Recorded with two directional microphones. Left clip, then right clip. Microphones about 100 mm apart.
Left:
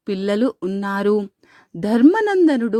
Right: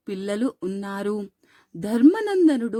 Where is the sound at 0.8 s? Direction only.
30° left (ahead or behind).